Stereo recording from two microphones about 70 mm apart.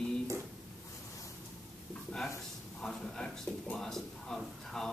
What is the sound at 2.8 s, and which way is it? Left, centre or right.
A man's voice, centre.